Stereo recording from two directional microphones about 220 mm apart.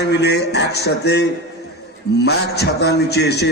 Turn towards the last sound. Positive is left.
turn(degrees=50)  # may be behind; listen again after turning